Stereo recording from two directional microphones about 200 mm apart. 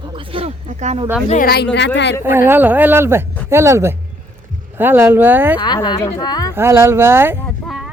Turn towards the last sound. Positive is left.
turn(degrees=0)  # may be behind; listen again after turning